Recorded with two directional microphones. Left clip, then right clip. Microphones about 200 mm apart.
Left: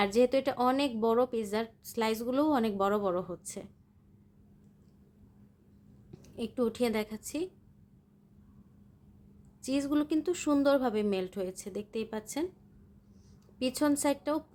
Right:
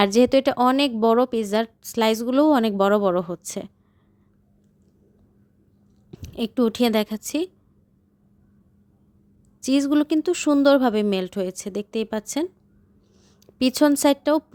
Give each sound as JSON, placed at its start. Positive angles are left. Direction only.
{"t": 0.0, "sound": "a woman's voice", "side_deg": -40}
{"t": 6.1, "sound": "a woman's voice", "side_deg": -45}
{"t": 9.6, "sound": "a woman's voice", "side_deg": -40}
{"t": 13.6, "sound": "a woman's voice", "side_deg": -40}